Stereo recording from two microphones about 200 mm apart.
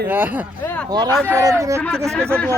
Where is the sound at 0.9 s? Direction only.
20° right (ahead or behind).